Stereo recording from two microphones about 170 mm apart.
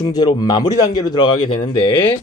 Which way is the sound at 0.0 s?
25° left (ahead or behind).